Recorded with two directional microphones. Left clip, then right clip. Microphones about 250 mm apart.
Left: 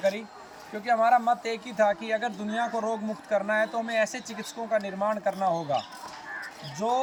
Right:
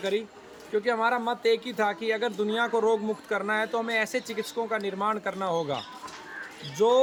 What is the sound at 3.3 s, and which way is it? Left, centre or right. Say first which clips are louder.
Speech: left 3 dB; right.